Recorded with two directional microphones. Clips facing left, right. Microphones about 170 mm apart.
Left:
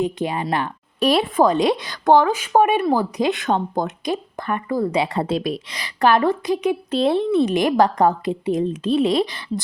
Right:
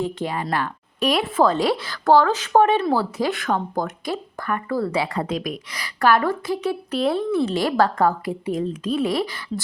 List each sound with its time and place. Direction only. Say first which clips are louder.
0.0 s speech: left 3 dB; 20° left (ahead or behind)
0.9 s speech: left 3 dB; 35° left (ahead or behind)
1.4 s speech: even; 15° left (ahead or behind)